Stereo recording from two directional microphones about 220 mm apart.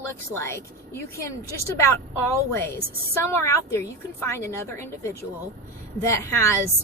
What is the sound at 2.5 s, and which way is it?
Speech, 10° left (ahead or behind).